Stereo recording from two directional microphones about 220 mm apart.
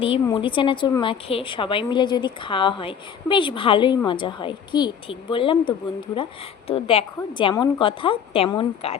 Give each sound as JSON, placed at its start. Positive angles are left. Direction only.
{"t": 0.0, "sound": "a woman's voice", "side_deg": 25}